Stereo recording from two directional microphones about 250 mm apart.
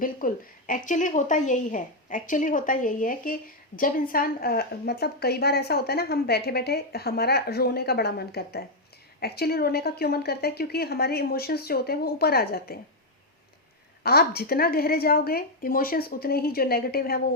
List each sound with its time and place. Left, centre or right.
0.0 s a woman's voice: left
14.0 s a woman's voice: left